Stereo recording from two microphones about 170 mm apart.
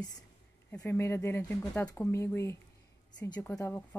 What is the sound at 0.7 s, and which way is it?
Speech, 15° left (ahead or behind).